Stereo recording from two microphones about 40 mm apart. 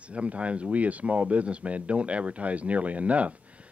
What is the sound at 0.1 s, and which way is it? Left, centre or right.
Speech, right.